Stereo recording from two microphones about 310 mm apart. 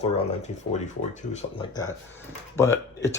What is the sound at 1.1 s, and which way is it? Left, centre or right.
Speech, left.